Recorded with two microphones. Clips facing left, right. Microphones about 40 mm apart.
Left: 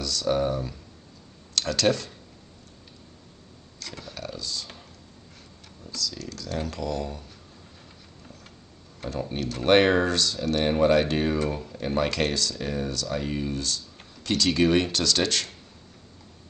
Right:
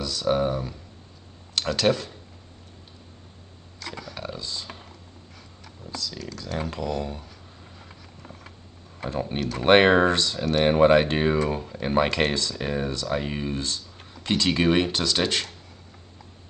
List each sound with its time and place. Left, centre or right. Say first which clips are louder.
0.0 s speech: right 1 dB; right
4.1 s computer keyboard: left 2 dB; right
5.9 s speech: even; right
9.0 s speech: right 2 dB; right